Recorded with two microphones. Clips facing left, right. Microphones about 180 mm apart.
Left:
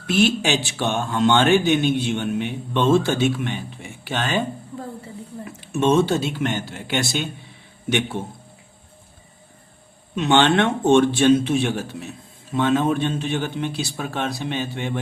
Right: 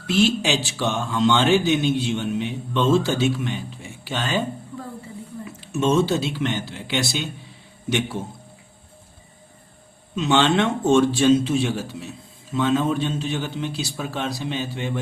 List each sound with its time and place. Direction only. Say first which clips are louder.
0.1 s speech: left 1 dB; 55° left (ahead or behind)
5.5 s speech: left 2 dB; 55° left (ahead or behind)
10.2 s speech: left 2 dB; 60° left (ahead or behind)